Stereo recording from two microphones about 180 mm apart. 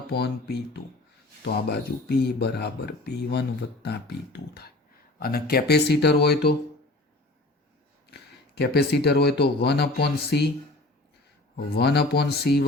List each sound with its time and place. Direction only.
0.1 s speech: 65° left (ahead or behind)
8.1 s speech: 65° left (ahead or behind)
11.5 s speech: 70° left (ahead or behind)